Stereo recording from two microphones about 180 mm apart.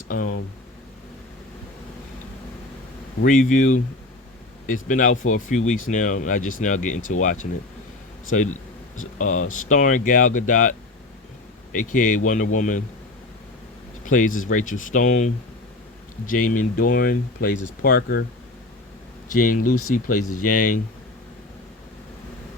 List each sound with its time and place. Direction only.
3.2 s speech: 45° left (ahead or behind)
9.1 s speech: 45° left (ahead or behind)
14.0 s speech: 45° left (ahead or behind)
19.3 s speech: 50° left (ahead or behind)